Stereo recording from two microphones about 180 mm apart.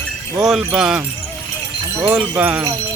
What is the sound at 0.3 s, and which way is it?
Speech, 5° right (ahead or behind).